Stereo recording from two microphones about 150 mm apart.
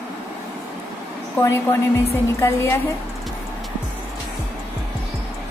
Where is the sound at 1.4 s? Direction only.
15° left (ahead or behind).